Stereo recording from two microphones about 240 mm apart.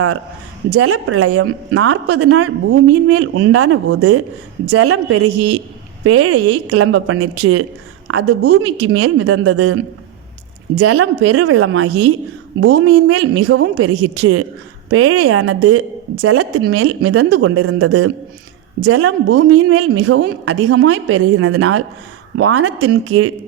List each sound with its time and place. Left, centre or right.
0.7 s a woman's voice: right
12.5 s a woman's voice: right
20.5 s a woman's voice: right